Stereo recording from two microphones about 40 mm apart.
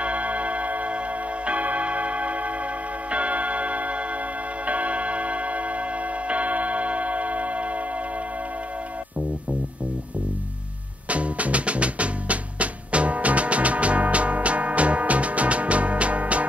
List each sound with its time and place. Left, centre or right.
0.0 s tick-tock: right
11.1 s music: right